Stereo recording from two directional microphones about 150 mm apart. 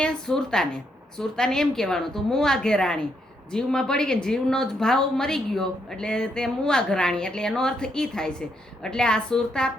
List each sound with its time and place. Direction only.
0.0 s speech: 5° left (ahead or behind)